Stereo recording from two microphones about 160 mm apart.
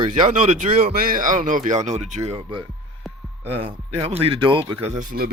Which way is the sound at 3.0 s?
Centre (ahead or behind).